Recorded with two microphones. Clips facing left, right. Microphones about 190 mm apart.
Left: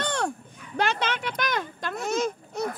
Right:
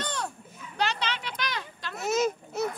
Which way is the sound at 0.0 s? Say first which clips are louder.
Left 6 dB; 65° left (ahead or behind).